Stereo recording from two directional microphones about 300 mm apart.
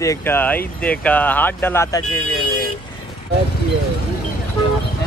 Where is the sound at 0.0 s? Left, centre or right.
Centre.